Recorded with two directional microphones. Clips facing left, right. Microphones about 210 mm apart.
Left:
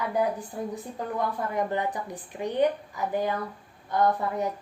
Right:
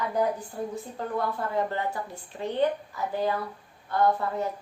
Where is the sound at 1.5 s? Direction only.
15° left (ahead or behind).